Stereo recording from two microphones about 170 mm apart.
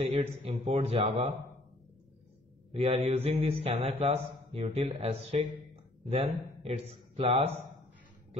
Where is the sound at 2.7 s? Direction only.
40° right (ahead or behind).